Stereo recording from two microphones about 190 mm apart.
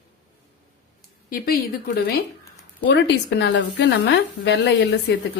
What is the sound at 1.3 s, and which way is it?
Speech, 50° left (ahead or behind).